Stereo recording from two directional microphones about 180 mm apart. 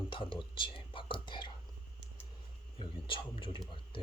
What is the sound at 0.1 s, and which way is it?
Whispering, 25° left (ahead or behind).